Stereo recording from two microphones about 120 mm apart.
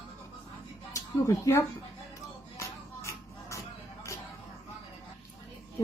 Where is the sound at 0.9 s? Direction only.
25° left (ahead or behind).